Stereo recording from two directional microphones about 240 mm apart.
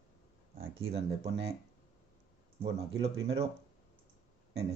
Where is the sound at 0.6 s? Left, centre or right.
Right.